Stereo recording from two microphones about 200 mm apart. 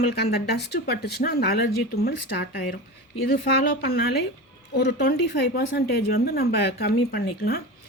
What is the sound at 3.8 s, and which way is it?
Speech, 55° left (ahead or behind).